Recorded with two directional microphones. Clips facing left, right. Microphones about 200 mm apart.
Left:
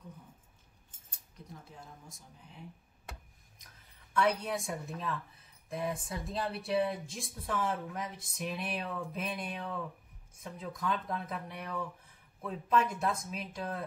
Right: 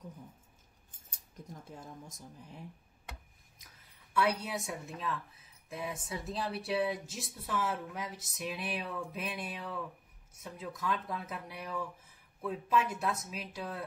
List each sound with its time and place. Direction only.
1.3 s keys jangling: 45° right (ahead or behind)
4.1 s a woman's voice: 5° right (ahead or behind)